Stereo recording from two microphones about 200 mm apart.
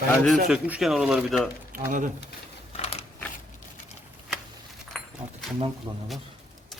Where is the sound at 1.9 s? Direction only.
40° right (ahead or behind).